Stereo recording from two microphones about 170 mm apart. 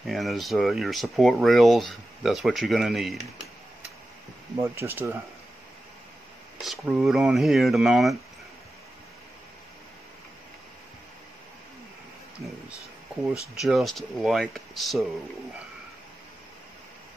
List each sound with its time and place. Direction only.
0.0 s speech: centre (ahead or behind)
4.6 s speech: 15° right (ahead or behind)
6.6 s speech: centre (ahead or behind)
13.6 s speech: centre (ahead or behind)